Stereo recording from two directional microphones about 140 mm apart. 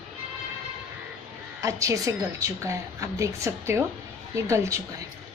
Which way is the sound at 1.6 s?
20° right (ahead or behind).